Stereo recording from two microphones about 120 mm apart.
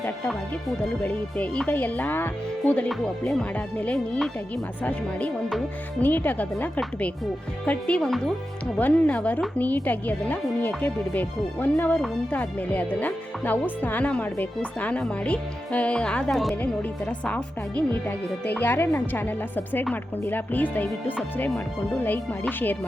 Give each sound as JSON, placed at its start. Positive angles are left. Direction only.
{"t": 1.0, "sound": "speech", "side_deg": 10}